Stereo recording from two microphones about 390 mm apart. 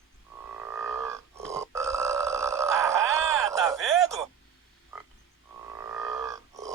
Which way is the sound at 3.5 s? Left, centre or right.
Centre.